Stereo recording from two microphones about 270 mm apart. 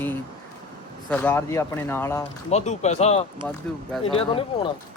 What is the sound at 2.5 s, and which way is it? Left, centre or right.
Speech, left.